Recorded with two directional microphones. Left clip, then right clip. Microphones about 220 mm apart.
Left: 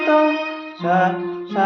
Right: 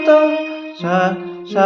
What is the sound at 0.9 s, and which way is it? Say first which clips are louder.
Music: even; 40° right (ahead or behind).